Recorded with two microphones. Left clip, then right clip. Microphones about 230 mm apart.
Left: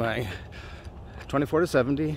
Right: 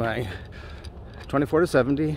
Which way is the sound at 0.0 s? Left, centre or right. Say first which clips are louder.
Right 1 dB; centre.